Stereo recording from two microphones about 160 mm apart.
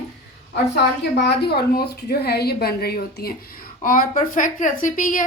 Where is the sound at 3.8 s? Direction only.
55° left (ahead or behind).